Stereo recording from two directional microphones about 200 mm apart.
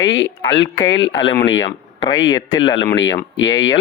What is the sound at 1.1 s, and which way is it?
Speech, 20° left (ahead or behind).